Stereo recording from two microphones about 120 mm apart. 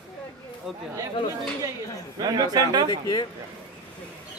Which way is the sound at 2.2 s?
35° right (ahead or behind).